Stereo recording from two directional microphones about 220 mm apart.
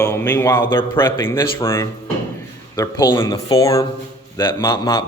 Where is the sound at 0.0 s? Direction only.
10° left (ahead or behind).